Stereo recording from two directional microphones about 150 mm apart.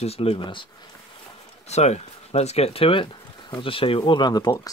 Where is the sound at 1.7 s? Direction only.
50° left (ahead or behind).